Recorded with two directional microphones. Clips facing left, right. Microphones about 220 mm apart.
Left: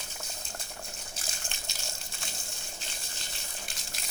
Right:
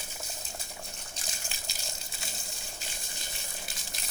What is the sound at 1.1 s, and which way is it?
Gush, centre (ahead or behind).